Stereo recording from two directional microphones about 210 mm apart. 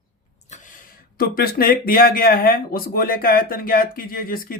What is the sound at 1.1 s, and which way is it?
Speech, 45° left (ahead or behind).